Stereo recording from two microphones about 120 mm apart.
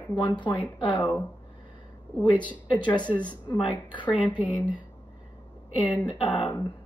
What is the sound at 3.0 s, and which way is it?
Speech, 10° left (ahead or behind).